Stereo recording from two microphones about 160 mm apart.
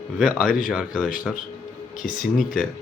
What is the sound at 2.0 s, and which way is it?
Speech, 55° left (ahead or behind).